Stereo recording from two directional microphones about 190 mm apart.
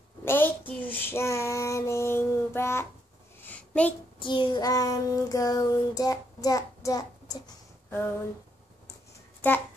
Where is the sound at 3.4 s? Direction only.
10° left (ahead or behind).